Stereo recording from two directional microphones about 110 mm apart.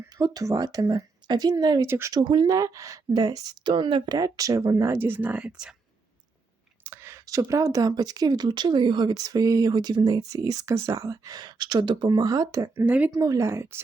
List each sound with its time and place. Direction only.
0.1 s speech: 35° right (ahead or behind)
1.9 s speech: 25° right (ahead or behind)
2.1 s speech: 40° right (ahead or behind); by 5.7 s 5° right (ahead or behind)
6.8 s speech: 20° right (ahead or behind)
12.8 s speech: 15° right (ahead or behind)
13.1 s speech: 30° right (ahead or behind)